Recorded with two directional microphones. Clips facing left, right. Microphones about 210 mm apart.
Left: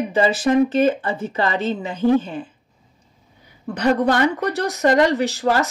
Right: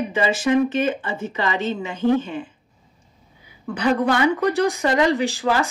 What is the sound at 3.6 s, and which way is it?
Speech, 40° left (ahead or behind).